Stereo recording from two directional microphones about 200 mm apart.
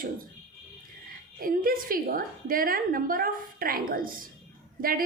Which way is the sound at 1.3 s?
45° right (ahead or behind).